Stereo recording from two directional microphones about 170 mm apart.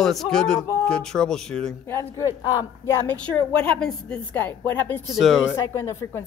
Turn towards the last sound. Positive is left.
turn(degrees=15)  # may be behind; listen again after turning